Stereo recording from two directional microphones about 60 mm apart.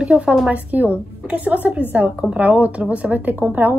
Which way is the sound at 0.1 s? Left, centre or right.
Right.